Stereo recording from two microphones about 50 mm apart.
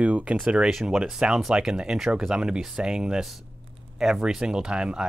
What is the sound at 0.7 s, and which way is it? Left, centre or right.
Speech, centre.